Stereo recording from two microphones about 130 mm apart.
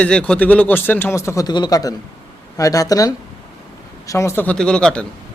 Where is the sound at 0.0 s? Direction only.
10° left (ahead or behind).